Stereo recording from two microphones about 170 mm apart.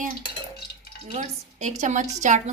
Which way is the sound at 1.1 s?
45° right (ahead or behind).